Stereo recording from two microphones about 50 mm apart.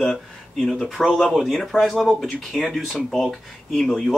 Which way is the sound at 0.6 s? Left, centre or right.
Centre.